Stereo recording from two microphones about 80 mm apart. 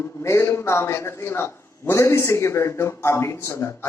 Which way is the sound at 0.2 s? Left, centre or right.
Left.